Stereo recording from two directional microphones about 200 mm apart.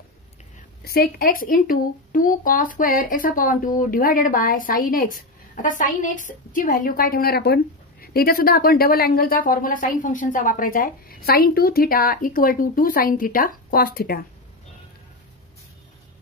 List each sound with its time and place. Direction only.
0.8 s speech: 50° left (ahead or behind)